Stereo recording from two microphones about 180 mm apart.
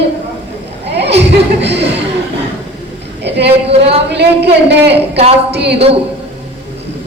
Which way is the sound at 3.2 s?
70° right (ahead or behind).